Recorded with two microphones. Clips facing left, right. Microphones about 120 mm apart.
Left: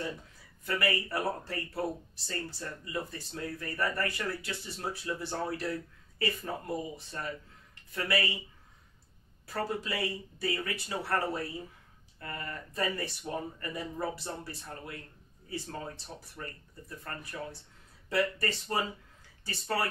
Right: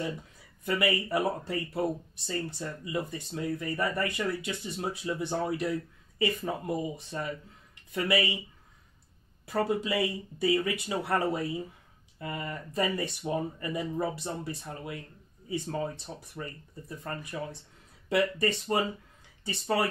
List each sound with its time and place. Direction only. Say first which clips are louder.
0.7 s speech: right 4 dB; 20° right (ahead or behind)
9.5 s speech: right 6 dB; 20° right (ahead or behind)